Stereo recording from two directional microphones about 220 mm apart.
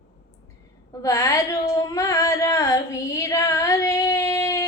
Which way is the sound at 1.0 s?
15° left (ahead or behind).